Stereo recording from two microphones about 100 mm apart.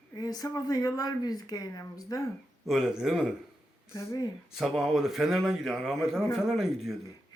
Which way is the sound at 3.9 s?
35° left (ahead or behind).